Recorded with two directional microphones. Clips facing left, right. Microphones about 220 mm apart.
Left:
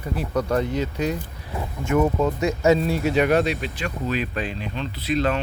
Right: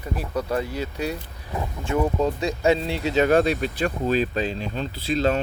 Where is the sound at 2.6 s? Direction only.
20° right (ahead or behind).